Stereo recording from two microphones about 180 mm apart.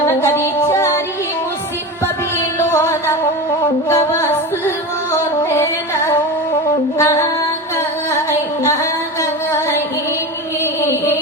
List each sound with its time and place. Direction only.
0.0 s music: 15° left (ahead or behind)
2.6 s music: 15° left (ahead or behind)
8.3 s music: 15° left (ahead or behind)
10.8 s a sound: 15° left (ahead or behind)